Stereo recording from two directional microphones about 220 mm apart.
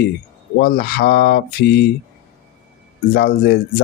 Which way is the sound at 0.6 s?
45° left (ahead or behind).